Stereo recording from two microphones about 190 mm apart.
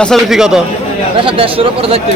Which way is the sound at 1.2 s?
30° right (ahead or behind).